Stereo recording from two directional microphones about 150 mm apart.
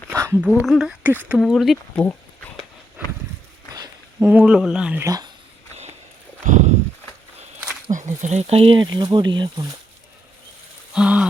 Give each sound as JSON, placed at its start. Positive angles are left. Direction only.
{"t": 0.1, "sound": "a sound", "side_deg": -20}
{"t": 0.6, "sound": "speech", "side_deg": 0}
{"t": 4.3, "sound": "speech", "side_deg": -10}
{"t": 5.0, "sound": "speech", "side_deg": -25}
{"t": 6.5, "sound": "clip-clop", "side_deg": -50}
{"t": 7.9, "sound": "speech", "side_deg": -55}
{"t": 10.9, "sound": "speech", "side_deg": -5}